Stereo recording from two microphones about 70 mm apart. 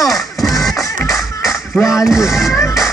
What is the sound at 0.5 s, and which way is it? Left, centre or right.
Music, centre.